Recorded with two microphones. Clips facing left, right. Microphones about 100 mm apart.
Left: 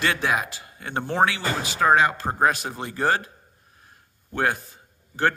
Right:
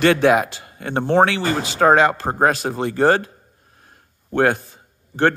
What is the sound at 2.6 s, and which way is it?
Speech, 50° right (ahead or behind).